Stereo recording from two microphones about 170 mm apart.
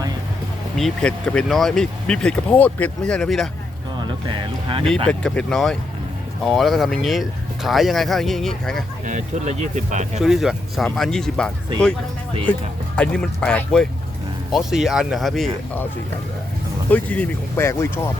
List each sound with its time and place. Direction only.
0.8 s speech: centre (ahead or behind)
5.0 s speech: 5° left (ahead or behind)
9.0 s speech: 45° right (ahead or behind)
10.2 s speech: centre (ahead or behind)
13.0 s speech: 5° left (ahead or behind)
16.9 s speech: 10° left (ahead or behind)